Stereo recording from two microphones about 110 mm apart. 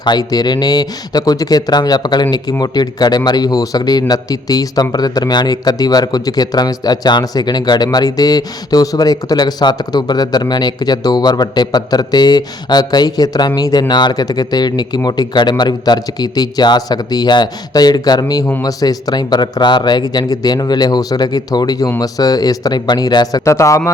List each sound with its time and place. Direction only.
0.0 s speech: 40° left (ahead or behind)